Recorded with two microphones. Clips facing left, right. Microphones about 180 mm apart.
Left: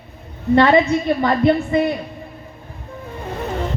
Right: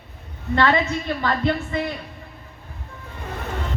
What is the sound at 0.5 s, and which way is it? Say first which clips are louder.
A man's voice: left 7 dB; 20° left (ahead or behind).